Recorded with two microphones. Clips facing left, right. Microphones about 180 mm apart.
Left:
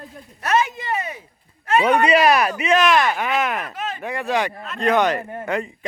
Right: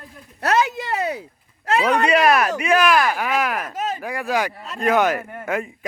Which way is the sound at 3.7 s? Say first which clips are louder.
Right 3 dB; 40° right (ahead or behind).